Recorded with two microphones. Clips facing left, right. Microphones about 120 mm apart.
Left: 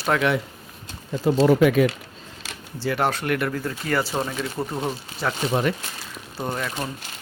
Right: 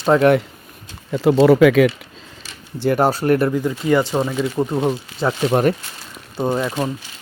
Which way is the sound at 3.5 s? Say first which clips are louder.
Right 8 dB; 20° right (ahead or behind).